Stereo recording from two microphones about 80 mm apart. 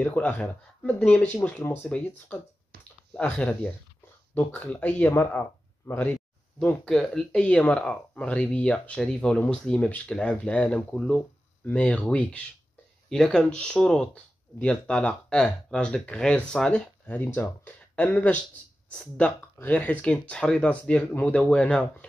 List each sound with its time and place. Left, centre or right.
0.0 s speech: left
6.6 s speech: centre